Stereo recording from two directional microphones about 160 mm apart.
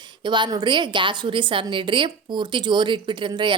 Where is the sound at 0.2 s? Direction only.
30° right (ahead or behind).